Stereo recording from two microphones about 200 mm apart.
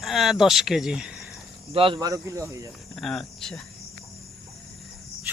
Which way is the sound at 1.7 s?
25° right (ahead or behind).